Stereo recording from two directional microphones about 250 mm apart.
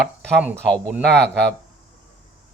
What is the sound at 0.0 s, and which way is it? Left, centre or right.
Speech, centre.